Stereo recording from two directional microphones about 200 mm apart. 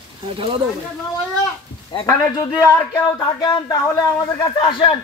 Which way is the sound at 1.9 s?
20° left (ahead or behind).